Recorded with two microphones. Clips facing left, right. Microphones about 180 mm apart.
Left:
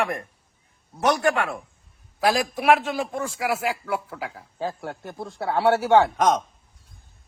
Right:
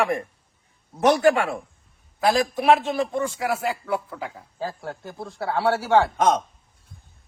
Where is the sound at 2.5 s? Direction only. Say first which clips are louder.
Right 1 dB; 5° left (ahead or behind).